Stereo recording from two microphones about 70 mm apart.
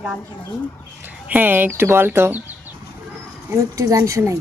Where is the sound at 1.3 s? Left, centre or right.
Right.